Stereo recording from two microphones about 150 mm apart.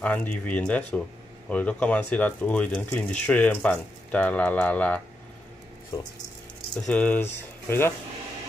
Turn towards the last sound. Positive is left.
turn(degrees=15)  # may be behind; listen again after turning